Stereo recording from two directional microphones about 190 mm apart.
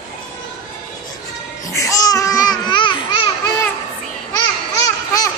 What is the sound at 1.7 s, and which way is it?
Babbling, 15° left (ahead or behind).